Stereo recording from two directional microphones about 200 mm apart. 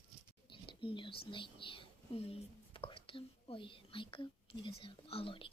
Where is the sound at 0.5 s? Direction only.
25° left (ahead or behind).